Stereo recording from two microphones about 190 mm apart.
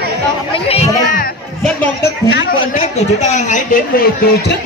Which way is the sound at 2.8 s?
40° left (ahead or behind).